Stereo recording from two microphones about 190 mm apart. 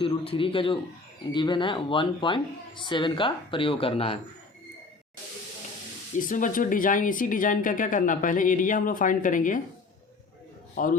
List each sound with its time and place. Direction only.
0.0 s speech: 30° left (ahead or behind)
6.1 s speech: 45° left (ahead or behind)
10.8 s speech: 45° left (ahead or behind)